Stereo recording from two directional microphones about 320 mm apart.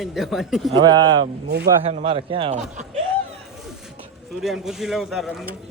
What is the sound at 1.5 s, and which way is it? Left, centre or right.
A man's voice, right.